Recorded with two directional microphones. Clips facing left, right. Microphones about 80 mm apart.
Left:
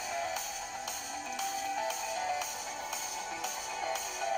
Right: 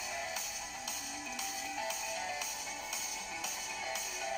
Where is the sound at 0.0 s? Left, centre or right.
Left.